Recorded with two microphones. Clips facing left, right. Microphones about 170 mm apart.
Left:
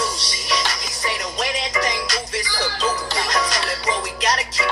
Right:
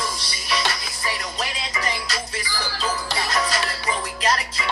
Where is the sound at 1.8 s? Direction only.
80° left.